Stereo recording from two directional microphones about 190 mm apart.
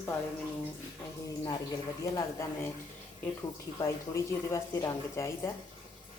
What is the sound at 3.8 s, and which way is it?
Speech, 15° left (ahead or behind).